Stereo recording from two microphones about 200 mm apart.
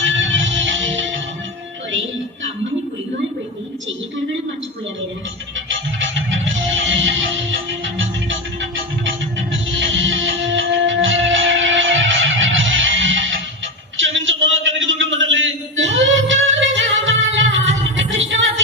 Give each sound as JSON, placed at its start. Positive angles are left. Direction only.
{"t": 0.0, "sound": "music", "side_deg": -70}
{"t": 5.7, "sound": "music", "side_deg": -70}
{"t": 9.7, "sound": "music", "side_deg": -70}
{"t": 13.9, "sound": "a sound", "side_deg": -70}
{"t": 17.9, "sound": "music", "side_deg": -70}